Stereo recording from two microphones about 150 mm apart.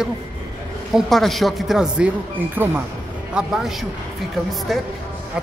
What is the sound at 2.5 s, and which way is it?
Speech, 15° right (ahead or behind).